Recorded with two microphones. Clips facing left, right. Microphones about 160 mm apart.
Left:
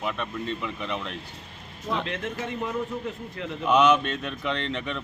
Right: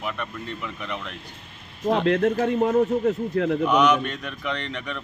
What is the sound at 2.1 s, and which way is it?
A man's voice, 45° right (ahead or behind).